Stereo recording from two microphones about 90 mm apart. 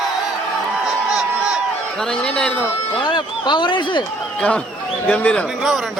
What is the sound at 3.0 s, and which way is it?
Speech, 55° left (ahead or behind).